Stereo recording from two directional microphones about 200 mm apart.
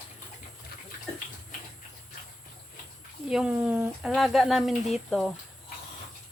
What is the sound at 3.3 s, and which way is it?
Speech, 5° right (ahead or behind).